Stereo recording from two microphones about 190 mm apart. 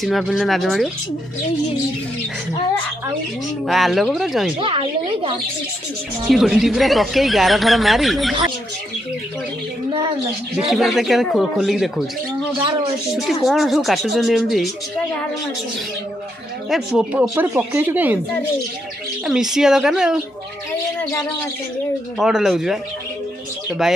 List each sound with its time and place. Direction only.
0.0 s speech: centre (ahead or behind)
3.6 s speech: centre (ahead or behind)
4.6 s speech: 25° right (ahead or behind)
6.2 s speech: 5° right (ahead or behind)
10.7 s speech: centre (ahead or behind)
13.1 s speech: centre (ahead or behind)
16.7 s speech: 5° right (ahead or behind)
19.2 s speech: centre (ahead or behind)
22.2 s speech: centre (ahead or behind)
23.8 s speech: centre (ahead or behind)